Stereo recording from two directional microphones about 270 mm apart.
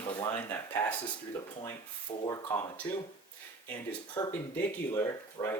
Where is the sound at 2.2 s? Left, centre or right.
Centre.